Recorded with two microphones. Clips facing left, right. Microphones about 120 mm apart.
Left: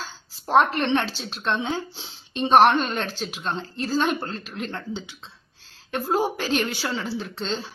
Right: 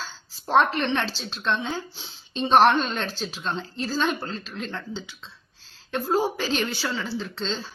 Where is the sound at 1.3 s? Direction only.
20° left (ahead or behind).